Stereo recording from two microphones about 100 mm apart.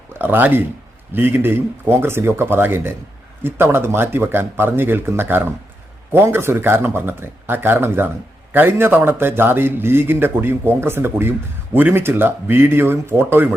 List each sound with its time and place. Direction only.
0.1 s a man's voice: 20° right (ahead or behind)